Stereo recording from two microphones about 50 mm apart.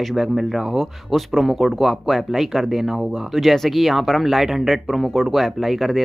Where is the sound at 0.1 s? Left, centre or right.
Centre.